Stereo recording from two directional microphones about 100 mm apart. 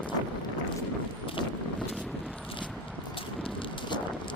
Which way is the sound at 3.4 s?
60° left (ahead or behind).